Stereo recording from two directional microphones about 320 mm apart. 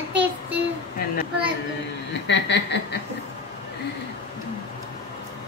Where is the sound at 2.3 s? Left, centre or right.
Left.